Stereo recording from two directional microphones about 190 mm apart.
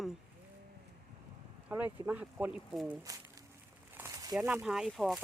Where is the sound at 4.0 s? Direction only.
20° right (ahead or behind).